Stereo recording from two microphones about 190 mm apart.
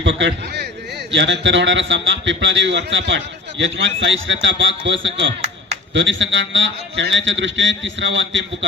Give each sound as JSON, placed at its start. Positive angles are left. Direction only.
{"t": 0.0, "sound": "a man's voice", "side_deg": -75}